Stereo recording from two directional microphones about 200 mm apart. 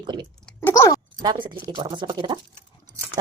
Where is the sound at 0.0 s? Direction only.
20° right (ahead or behind).